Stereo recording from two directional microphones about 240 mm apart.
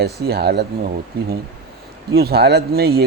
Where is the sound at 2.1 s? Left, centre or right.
Right.